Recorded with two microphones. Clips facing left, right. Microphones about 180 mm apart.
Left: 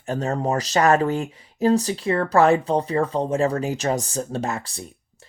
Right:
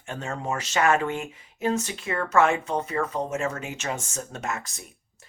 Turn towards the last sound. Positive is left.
turn(degrees=30)  # may be behind; listen again after turning